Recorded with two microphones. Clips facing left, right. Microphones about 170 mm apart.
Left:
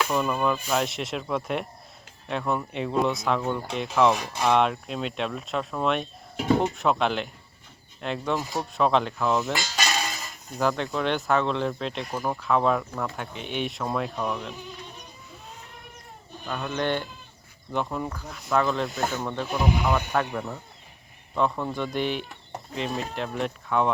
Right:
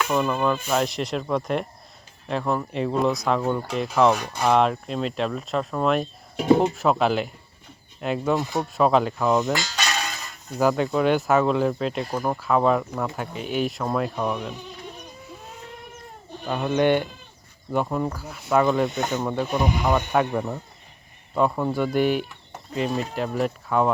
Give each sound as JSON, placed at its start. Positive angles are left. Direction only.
{"t": 0.1, "sound": "speech", "side_deg": 0}
{"t": 16.5, "sound": "speech", "side_deg": -20}
{"t": 19.1, "sound": "speech", "side_deg": -15}
{"t": 19.4, "sound": "speech", "side_deg": 0}
{"t": 21.3, "sound": "speech", "side_deg": -10}